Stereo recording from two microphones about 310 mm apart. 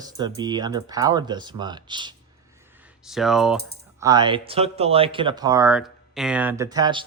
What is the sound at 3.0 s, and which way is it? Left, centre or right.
Speech, centre.